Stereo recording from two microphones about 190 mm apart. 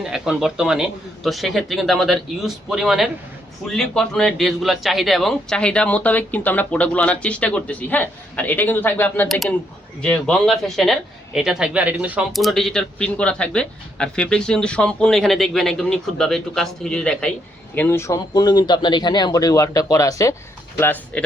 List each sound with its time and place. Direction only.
0.0 s a man's voice: centre (ahead or behind)